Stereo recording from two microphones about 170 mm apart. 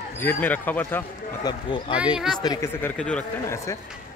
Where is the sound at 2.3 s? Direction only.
25° left (ahead or behind).